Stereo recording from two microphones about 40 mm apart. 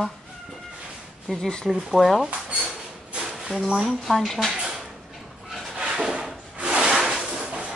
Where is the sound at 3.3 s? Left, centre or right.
Centre.